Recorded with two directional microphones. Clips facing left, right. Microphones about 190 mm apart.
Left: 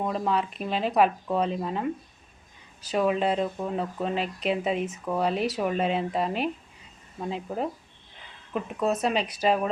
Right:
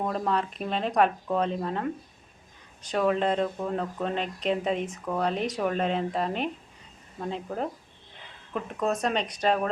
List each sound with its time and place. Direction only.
0.0 s speech: 5° left (ahead or behind)